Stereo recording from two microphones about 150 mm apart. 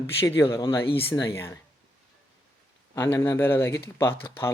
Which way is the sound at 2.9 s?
20° left (ahead or behind).